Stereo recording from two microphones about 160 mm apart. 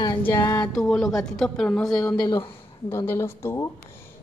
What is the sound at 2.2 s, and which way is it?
Speech, 30° left (ahead or behind).